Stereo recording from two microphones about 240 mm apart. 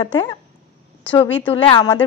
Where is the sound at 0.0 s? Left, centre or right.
Centre.